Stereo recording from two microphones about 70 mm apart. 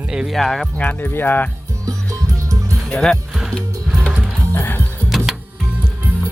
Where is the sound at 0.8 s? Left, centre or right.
Left.